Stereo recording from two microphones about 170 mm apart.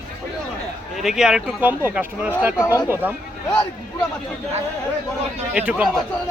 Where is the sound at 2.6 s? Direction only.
20° left (ahead or behind).